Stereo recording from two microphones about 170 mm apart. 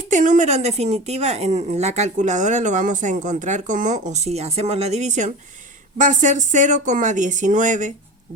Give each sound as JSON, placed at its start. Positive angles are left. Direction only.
{"t": 0.1, "sound": "speech", "side_deg": -45}